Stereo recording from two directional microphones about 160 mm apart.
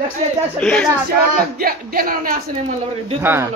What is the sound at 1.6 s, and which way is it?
Music, 65° right (ahead or behind).